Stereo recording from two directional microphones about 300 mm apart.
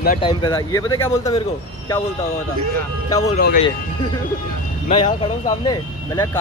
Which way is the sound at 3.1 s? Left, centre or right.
Centre.